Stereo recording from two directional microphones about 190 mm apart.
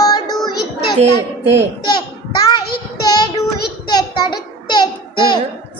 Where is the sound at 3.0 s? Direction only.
20° left (ahead or behind).